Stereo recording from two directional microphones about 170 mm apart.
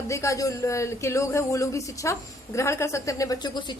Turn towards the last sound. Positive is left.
turn(degrees=20)  # may be behind; listen again after turning